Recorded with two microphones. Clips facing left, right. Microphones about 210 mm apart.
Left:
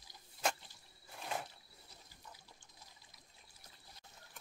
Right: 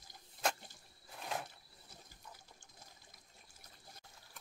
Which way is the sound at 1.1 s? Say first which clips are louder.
Even; centre (ahead or behind).